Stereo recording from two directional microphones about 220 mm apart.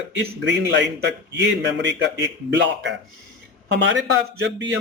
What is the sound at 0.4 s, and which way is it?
A man's voice, 50° right (ahead or behind).